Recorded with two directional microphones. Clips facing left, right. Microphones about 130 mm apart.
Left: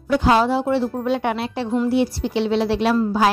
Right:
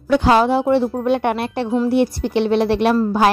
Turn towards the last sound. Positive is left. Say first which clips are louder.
# right 2 dB
turn(degrees=-60)  # may be behind; listen again after turning